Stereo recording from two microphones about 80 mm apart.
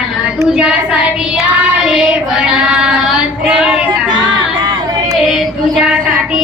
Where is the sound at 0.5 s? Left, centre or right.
Centre.